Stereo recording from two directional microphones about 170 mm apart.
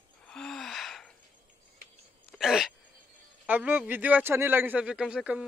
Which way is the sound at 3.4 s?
10° right (ahead or behind).